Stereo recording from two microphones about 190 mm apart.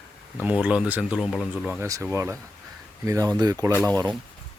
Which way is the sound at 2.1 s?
15° right (ahead or behind).